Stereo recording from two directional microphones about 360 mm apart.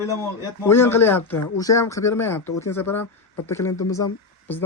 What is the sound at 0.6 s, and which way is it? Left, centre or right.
Speech, centre.